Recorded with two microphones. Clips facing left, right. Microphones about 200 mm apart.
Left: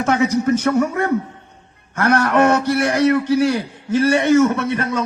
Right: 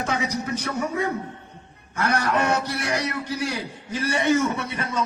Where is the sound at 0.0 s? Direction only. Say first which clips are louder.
Left 10 dB; 60° left (ahead or behind).